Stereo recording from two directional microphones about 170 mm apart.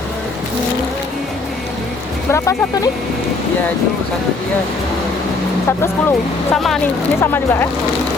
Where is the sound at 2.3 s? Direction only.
15° left (ahead or behind).